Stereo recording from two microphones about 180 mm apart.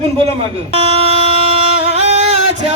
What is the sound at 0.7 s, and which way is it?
Music, 35° right (ahead or behind).